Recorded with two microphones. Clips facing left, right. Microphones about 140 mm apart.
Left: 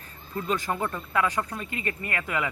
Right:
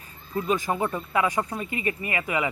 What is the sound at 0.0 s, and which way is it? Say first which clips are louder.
Speech: right 4 dB; 10° right (ahead or behind).